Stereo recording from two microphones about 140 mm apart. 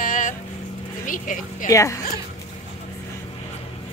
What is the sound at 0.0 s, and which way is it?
Vehicle, 70° left (ahead or behind).